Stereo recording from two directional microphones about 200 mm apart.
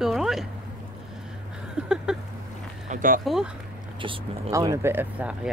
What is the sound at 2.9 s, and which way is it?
Speech, 45° right (ahead or behind).